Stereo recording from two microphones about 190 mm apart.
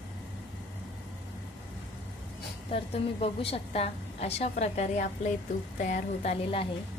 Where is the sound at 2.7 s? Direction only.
30° left (ahead or behind).